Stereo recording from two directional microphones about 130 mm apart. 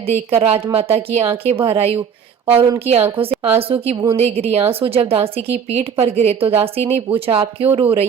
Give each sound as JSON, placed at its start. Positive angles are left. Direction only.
{"t": 0.0, "sound": "speech", "side_deg": -55}
{"t": 3.9, "sound": "a woman's voice", "side_deg": -25}
{"t": 4.2, "sound": "speech", "side_deg": -50}